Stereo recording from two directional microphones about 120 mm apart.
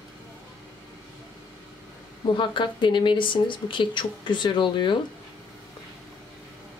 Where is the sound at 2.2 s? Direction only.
40° left (ahead or behind).